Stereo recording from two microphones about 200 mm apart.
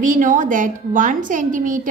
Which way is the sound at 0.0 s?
40° right (ahead or behind).